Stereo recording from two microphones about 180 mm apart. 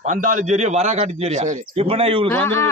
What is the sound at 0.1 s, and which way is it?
A man's voice, 45° right (ahead or behind).